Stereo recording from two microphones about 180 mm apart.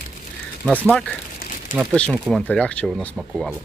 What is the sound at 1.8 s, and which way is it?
Speech, 5° left (ahead or behind).